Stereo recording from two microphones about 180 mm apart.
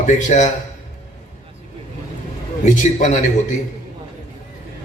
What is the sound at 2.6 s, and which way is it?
Speech, 40° left (ahead or behind).